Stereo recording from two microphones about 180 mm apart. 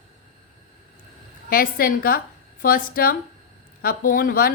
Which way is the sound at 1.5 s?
55° left (ahead or behind).